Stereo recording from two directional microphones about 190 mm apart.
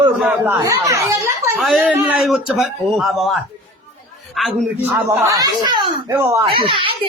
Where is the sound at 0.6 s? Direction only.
15° right (ahead or behind).